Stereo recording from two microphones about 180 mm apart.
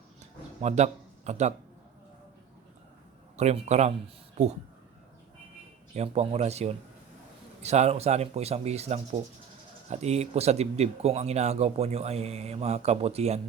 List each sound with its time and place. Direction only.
0.6 s speech: 40° right (ahead or behind)
3.3 s speech: 40° right (ahead or behind)
5.9 s speech: 35° right (ahead or behind)